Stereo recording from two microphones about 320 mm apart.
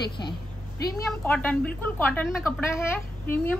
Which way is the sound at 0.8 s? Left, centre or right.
Centre.